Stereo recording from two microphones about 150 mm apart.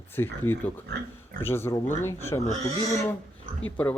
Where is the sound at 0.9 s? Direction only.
90° right.